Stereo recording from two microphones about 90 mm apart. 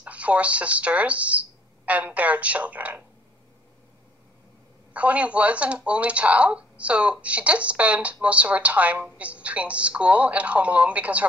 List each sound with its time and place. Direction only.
0.0 s speech: 15° right (ahead or behind)
4.9 s speech: 15° right (ahead or behind)